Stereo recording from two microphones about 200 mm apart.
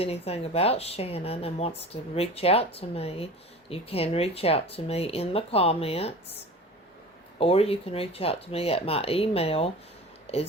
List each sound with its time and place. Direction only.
0.0 s a woman's voice: 30° left (ahead or behind)
7.3 s speech: 30° left (ahead or behind)